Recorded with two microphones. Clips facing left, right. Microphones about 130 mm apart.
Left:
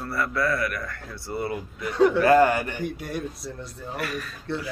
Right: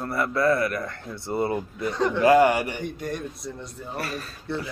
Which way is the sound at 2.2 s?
15° right (ahead or behind).